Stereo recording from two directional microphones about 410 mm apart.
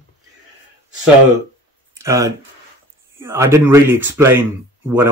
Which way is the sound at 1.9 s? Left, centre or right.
Centre.